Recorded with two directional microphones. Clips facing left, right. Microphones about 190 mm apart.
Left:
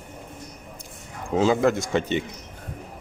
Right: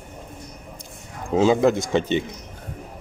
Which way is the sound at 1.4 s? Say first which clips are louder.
Right 3 dB; 20° right (ahead or behind).